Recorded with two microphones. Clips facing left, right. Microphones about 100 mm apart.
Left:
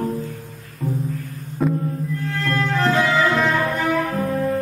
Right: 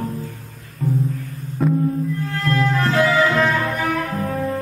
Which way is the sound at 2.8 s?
Centre (ahead or behind).